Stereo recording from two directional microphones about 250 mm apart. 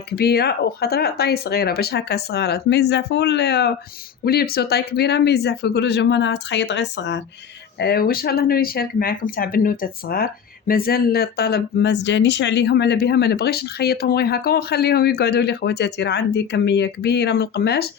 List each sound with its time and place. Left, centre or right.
0.2 s speech: left